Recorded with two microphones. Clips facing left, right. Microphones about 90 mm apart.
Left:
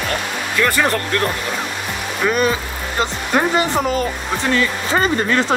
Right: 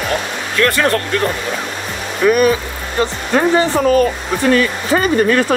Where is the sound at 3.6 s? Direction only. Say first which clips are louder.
Right 5 dB; 20° left (ahead or behind).